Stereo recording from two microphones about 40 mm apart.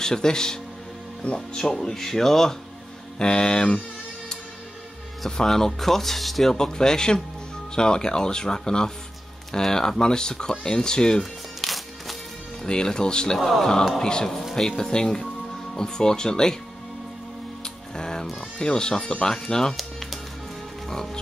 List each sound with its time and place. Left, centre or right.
0.0 s speech: centre
3.2 s speech: centre
5.4 s speech: centre
6.5 s speech: centre
11.6 s music: centre
12.6 s speech: centre
13.4 s music: centre
14.0 s speech: centre
17.9 s music: centre
18.6 s speech: centre
19.8 s music: centre
20.9 s speech: centre